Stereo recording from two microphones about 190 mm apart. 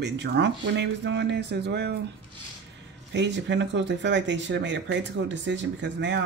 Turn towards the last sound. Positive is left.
turn(degrees=-70)  # may be behind; listen again after turning